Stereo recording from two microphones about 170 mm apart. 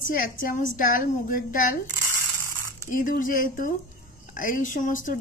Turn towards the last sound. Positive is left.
turn(degrees=50)  # may be behind; listen again after turning